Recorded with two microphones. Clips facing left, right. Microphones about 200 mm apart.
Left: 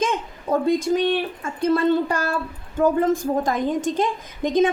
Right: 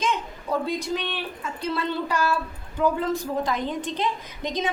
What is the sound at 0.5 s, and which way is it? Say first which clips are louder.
A woman's voice: left 7 dB; 50° left (ahead or behind).